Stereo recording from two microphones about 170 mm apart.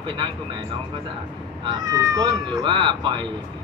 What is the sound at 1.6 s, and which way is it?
Speech, 20° right (ahead or behind).